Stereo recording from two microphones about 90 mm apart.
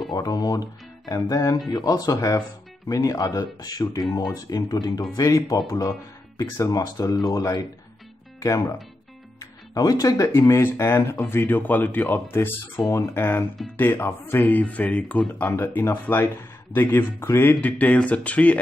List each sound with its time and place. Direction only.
0.1 s speech: 45° left (ahead or behind); by 18.6 s 15° left (ahead or behind)